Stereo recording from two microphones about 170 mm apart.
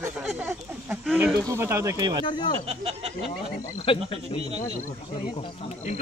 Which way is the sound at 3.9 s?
30° left (ahead or behind).